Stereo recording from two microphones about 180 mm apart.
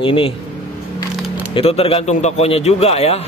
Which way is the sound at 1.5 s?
35° left (ahead or behind).